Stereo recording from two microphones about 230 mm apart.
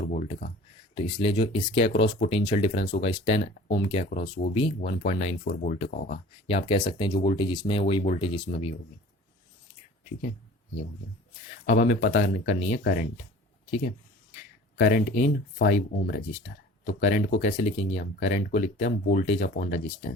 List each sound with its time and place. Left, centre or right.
0.1 s a sound: left
0.9 s speech: left
4.1 s speech: left
11.6 s speech: left
14.8 s speech: left